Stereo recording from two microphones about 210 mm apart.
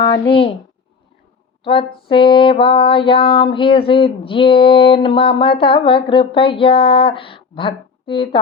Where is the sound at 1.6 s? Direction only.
25° left (ahead or behind).